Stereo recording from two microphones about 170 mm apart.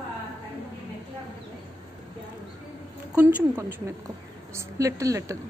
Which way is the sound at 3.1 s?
10° right (ahead or behind).